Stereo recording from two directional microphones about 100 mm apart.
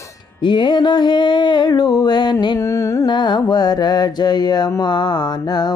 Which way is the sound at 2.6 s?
30° left (ahead or behind).